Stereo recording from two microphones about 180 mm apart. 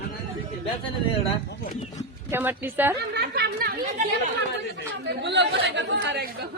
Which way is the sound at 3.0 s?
65° right (ahead or behind).